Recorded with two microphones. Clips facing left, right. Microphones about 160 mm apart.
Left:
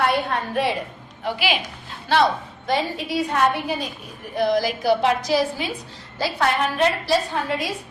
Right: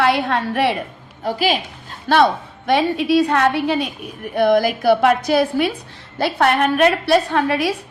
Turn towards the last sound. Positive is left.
turn(degrees=-75)  # may be behind; listen again after turning